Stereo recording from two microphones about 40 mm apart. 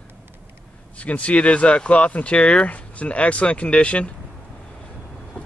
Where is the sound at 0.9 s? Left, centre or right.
Left.